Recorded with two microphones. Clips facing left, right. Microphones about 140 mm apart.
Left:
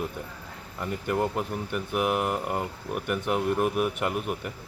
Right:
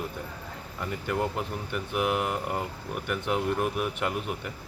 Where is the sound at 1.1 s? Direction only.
Centre (ahead or behind).